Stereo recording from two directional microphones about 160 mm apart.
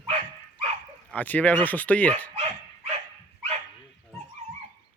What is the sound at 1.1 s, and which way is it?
Speech, 10° left (ahead or behind).